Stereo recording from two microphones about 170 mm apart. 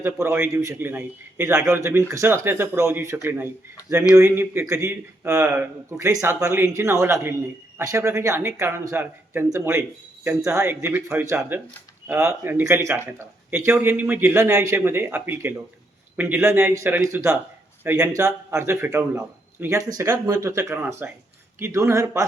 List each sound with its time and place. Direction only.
0.0 s a man's voice: 15° right (ahead or behind)